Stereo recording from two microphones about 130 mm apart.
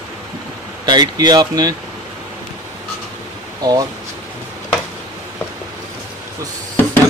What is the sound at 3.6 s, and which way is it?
Speech, 30° right (ahead or behind).